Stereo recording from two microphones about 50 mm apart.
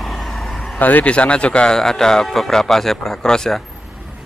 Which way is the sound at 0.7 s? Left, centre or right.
Left.